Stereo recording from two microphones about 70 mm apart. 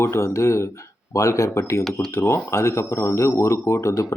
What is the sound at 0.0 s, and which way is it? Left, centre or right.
Speech, left.